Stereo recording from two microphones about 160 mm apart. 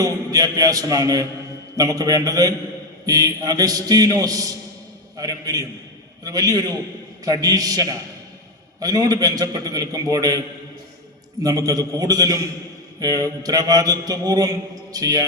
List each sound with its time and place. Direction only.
0.0 s a man's voice: 20° right (ahead or behind)
11.4 s a man's voice: 25° right (ahead or behind)